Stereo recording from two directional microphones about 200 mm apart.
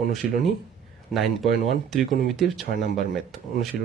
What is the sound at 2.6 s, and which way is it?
Speech, 45° left (ahead or behind).